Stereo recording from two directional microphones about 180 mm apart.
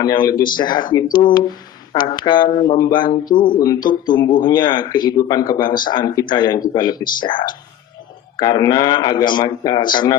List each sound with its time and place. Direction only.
0.0 s speech: 20° left (ahead or behind)
3.2 s speech: 50° left (ahead or behind)
3.5 s speech: 20° left (ahead or behind)